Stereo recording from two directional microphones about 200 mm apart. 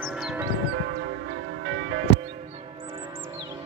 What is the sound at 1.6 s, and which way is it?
Music, 65° right (ahead or behind).